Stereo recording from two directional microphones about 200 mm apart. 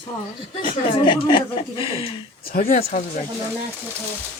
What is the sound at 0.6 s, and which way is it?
Speech, 25° left (ahead or behind).